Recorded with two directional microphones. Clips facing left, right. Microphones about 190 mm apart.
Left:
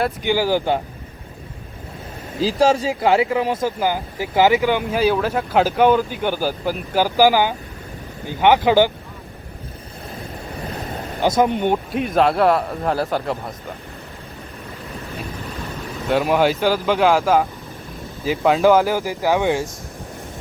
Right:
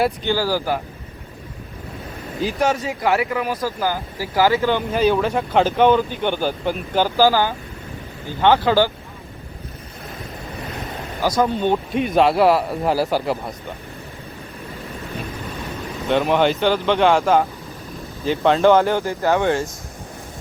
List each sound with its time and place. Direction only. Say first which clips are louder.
0.3 s speech: left 2 dB; 15° left (ahead or behind)
2.4 s speech: left 4 dB; 30° left (ahead or behind)
11.2 s speech: left 2 dB; 20° left (ahead or behind)
11.9 s a man's voice: right 1 dB; centre (ahead or behind)
16.0 s a man's voice: even; 5° left (ahead or behind)